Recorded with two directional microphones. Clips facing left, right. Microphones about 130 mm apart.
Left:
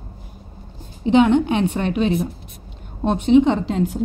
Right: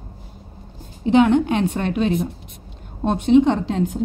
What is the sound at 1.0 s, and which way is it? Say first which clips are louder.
Speech: even; 25° left (ahead or behind).